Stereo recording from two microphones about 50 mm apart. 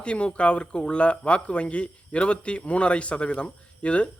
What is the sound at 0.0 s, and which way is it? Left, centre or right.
A man's voice, left.